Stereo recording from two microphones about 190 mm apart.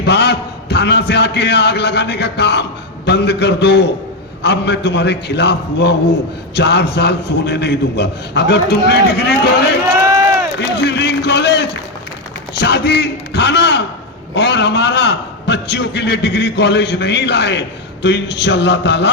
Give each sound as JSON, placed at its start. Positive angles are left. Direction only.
{"t": 0.0, "sound": "a man's voice", "side_deg": 60}
{"t": 10.8, "sound": "a sound", "side_deg": 65}
{"t": 12.5, "sound": "a man's voice", "side_deg": 65}